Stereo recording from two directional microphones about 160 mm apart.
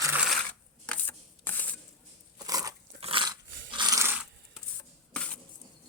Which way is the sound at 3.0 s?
35° right (ahead or behind).